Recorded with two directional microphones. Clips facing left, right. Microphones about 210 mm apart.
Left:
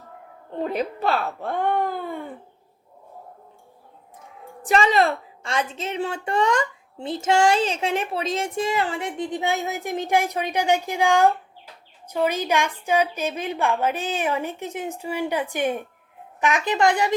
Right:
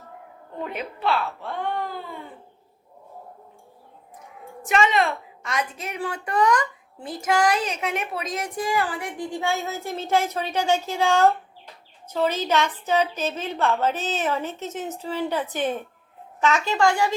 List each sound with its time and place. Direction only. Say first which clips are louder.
0.6 s speech: left 4 dB; 35° left (ahead or behind); by 2.2 s 55° left (ahead or behind)
4.6 s a woman's voice: left 2 dB; 35° left (ahead or behind); by 17.2 s 20° left (ahead or behind)